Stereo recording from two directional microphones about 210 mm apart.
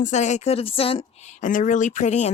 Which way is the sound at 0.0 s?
35° left (ahead or behind).